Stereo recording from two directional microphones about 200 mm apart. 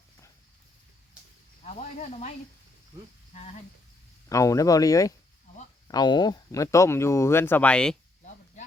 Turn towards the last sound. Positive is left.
turn(degrees=5)  # may be behind; listen again after turning